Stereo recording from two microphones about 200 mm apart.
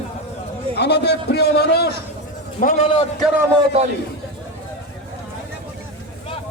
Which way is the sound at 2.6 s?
45° left (ahead or behind).